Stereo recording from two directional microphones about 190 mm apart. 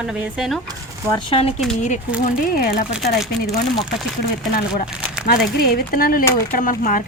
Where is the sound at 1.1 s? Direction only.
30° left (ahead or behind).